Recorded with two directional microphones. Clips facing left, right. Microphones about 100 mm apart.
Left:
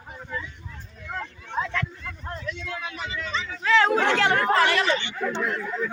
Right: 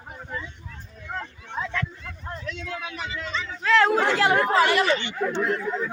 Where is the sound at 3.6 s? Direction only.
Centre (ahead or behind).